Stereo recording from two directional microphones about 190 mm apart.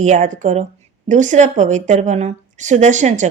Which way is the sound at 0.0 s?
40° right (ahead or behind).